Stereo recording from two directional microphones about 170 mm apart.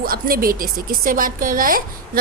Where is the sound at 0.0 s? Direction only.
60° right (ahead or behind).